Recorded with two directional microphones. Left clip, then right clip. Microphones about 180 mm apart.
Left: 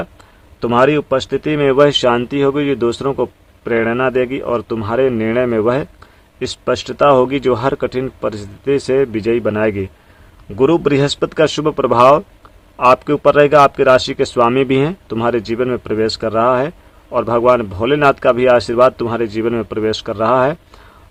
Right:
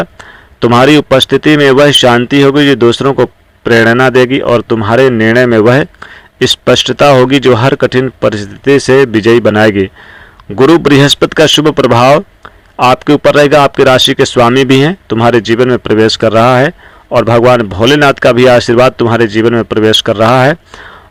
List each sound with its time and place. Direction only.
0.6 s speech: 35° right (ahead or behind)